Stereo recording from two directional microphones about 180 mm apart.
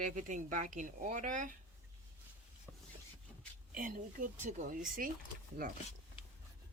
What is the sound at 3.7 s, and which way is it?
Speech, 50° right (ahead or behind).